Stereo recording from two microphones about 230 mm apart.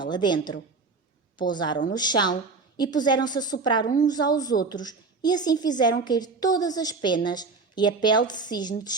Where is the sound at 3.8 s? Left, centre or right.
Left.